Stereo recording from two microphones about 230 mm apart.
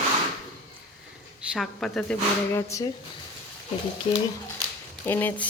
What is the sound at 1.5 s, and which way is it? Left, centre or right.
Speech, centre.